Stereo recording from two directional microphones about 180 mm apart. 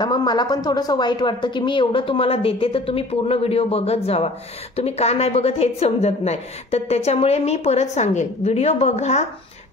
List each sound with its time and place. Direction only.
0.0 s a woman's voice: 25° left (ahead or behind); by 9.2 s 40° left (ahead or behind)